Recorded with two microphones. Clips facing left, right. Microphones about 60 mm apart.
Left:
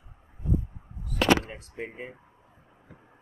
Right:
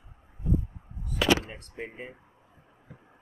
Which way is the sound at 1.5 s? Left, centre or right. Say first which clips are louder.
Left 2 dB; centre.